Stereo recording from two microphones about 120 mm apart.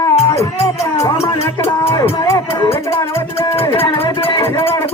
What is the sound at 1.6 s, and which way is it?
Speech, 50° left (ahead or behind).